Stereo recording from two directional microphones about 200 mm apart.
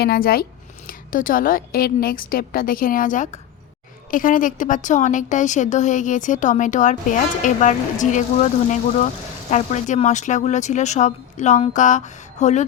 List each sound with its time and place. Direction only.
0.0 s a woman's voice: 50° left (ahead or behind)